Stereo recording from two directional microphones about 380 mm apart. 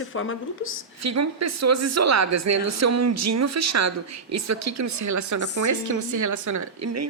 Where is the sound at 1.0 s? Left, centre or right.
Right.